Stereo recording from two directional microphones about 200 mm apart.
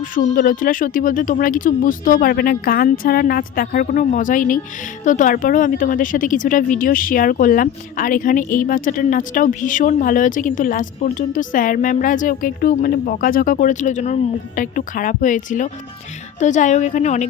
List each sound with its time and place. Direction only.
0.0 s a woman's voice: 40° left (ahead or behind)